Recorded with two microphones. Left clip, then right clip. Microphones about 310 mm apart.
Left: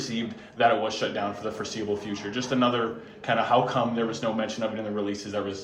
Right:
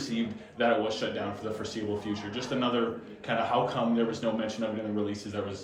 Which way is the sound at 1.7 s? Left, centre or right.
Left.